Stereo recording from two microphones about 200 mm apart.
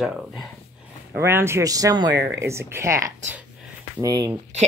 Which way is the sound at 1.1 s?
10° right (ahead or behind).